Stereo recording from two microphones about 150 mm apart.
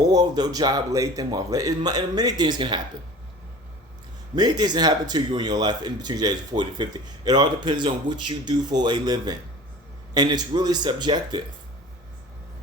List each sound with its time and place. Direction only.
0.0 s speech: 25° right (ahead or behind)
4.4 s a man's voice: 30° right (ahead or behind)